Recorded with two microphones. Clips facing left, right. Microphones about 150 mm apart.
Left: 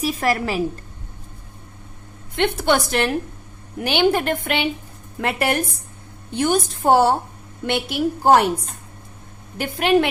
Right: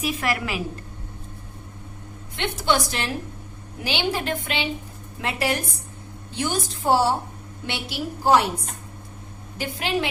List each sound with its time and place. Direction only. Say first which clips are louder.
0.0 s a woman's voice: left 4 dB; 40° left (ahead or behind)
2.3 s a woman's voice: left 5 dB; 55° left (ahead or behind)
9.6 s a woman's voice: left 8 dB; 60° left (ahead or behind)